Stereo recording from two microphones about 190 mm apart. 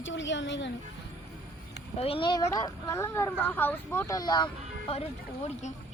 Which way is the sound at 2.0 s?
30° left (ahead or behind).